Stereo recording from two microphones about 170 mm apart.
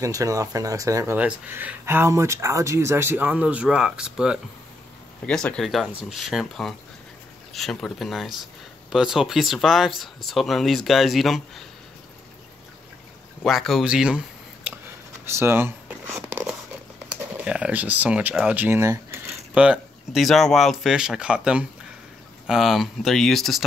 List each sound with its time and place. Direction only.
0.0 s speech: 20° right (ahead or behind); by 11.6 s centre (ahead or behind)
13.4 s speech: centre (ahead or behind)
15.2 s a sound: 15° right (ahead or behind)
17.1 s speech: 5° right (ahead or behind)